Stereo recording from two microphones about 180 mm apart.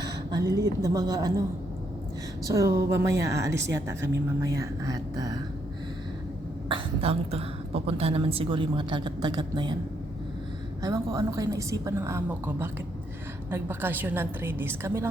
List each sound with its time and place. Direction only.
0.0 s a woman's voice: 25° right (ahead or behind)
2.5 s a woman's voice: 15° right (ahead or behind)
6.7 s a woman's voice: 30° right (ahead or behind)
10.8 s a woman's voice: 20° right (ahead or behind)